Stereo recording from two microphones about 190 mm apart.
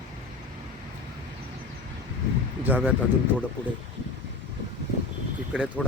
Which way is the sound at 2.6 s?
10° right (ahead or behind).